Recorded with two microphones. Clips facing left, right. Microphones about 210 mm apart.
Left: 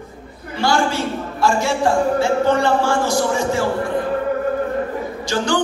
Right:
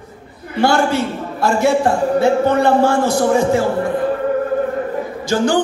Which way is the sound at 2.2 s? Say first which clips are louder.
Right 3 dB; 60° right (ahead or behind).